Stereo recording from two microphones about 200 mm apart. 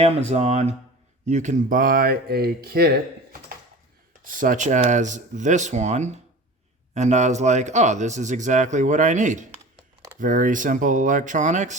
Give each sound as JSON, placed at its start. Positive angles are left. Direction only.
{"t": 0.0, "sound": "speech", "side_deg": -35}
{"t": 4.2, "sound": "speech", "side_deg": -40}